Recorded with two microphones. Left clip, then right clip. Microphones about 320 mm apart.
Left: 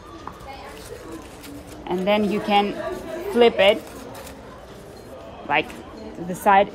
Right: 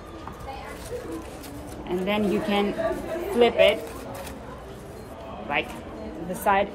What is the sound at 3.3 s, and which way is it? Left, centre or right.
Speech, left.